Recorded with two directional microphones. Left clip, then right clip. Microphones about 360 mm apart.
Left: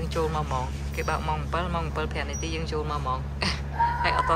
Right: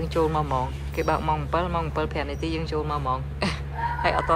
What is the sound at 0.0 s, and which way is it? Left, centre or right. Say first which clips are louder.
Speech: right 4 dB; centre.